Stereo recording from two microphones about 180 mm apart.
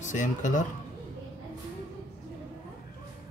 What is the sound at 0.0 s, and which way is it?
Speech, 45° left (ahead or behind).